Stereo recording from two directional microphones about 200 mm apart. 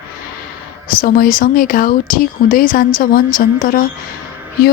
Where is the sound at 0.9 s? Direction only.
45° left (ahead or behind).